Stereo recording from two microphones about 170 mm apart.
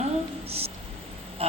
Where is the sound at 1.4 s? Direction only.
35° right (ahead or behind).